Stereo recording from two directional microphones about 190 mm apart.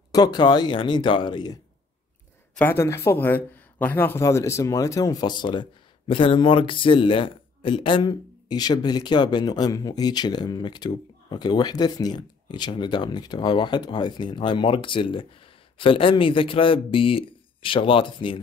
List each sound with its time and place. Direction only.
0.1 s a man's voice: 20° left (ahead or behind)
2.5 s a man's voice: 10° left (ahead or behind); by 18.4 s 25° left (ahead or behind)